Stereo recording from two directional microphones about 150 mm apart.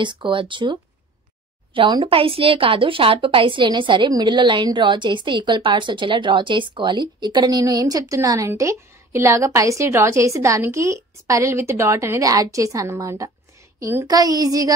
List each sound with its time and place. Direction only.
0.0 s speech: 30° right (ahead or behind)